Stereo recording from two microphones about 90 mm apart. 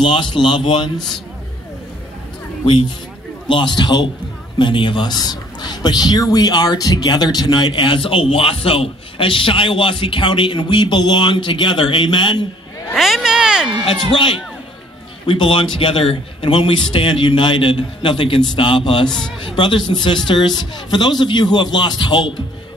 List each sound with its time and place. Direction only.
0.0 s a man's voice: 60° left (ahead or behind)
3.4 s a man's voice: 60° left (ahead or behind)
12.9 s a sound: 5° right (ahead or behind)
15.2 s a man's voice: 70° left (ahead or behind)
19.0 s a man's voice: 5° left (ahead or behind)
19.4 s a man's voice: 65° left (ahead or behind)